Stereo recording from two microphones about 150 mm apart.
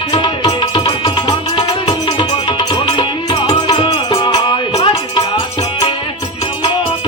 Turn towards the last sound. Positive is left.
turn(degrees=30)  # may be behind; listen again after turning